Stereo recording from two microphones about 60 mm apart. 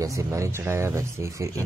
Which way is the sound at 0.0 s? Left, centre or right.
Right.